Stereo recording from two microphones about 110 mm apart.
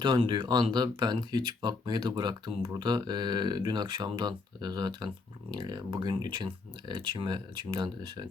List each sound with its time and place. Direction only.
0.0 s speech: 45° right (ahead or behind)